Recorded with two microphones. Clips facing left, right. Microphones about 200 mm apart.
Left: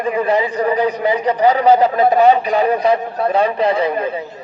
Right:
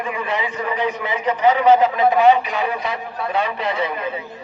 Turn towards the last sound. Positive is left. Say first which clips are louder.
# left 6 dB
turn(degrees=40)  # may be behind; listen again after turning